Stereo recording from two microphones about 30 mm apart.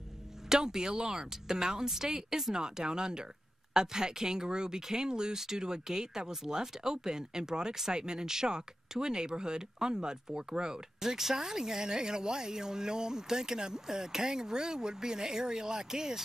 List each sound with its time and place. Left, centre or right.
0.5 s speech: right
2.5 s speech: right